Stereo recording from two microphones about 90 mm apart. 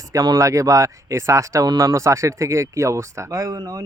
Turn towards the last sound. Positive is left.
turn(degrees=-40)  # may be behind; listen again after turning